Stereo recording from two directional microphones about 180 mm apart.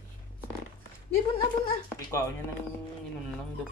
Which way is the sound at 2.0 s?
15° left (ahead or behind).